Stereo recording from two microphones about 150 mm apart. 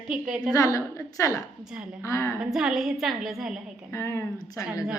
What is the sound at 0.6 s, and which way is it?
A woman's voice, 20° left (ahead or behind).